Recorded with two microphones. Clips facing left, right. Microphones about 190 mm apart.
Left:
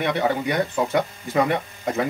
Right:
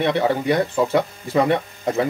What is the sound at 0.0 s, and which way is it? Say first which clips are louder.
A man's voice: right 3 dB; 30° right (ahead or behind).